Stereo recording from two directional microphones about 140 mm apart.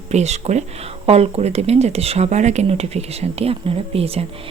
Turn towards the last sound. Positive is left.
turn(degrees=-45)  # may be behind; listen again after turning